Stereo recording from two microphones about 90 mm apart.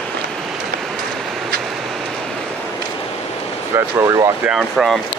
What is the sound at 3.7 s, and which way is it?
Speech, 35° right (ahead or behind).